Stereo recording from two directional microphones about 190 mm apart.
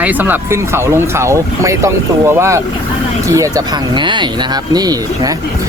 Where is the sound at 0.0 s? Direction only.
10° right (ahead or behind).